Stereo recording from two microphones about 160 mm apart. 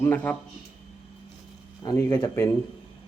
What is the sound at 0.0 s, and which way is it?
Speech, 10° left (ahead or behind).